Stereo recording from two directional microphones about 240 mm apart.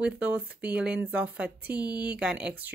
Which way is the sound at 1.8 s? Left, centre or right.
Centre.